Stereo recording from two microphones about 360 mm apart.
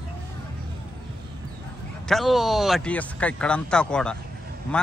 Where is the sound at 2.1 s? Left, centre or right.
Centre.